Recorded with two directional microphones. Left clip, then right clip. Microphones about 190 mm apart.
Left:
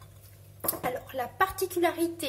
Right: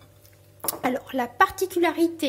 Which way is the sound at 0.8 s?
50° right (ahead or behind).